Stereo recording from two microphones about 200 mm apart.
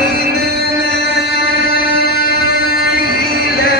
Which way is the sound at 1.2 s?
55° left (ahead or behind).